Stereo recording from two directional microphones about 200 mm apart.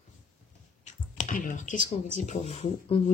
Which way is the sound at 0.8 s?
35° left (ahead or behind).